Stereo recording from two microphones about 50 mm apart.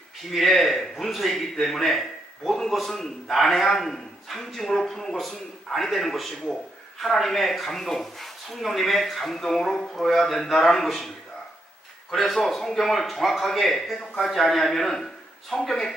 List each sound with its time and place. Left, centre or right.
0.3 s a man's voice: centre
12.1 s a man's voice: centre